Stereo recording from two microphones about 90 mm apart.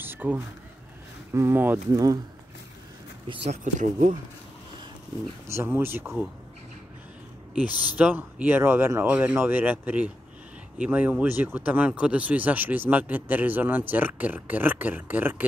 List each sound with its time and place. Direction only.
0.0 s a sound: 20° right (ahead or behind)
1.3 s speech: 30° right (ahead or behind)
1.9 s speech: 40° right (ahead or behind)
5.5 s speech: 25° right (ahead or behind)
7.5 s speech: 20° right (ahead or behind)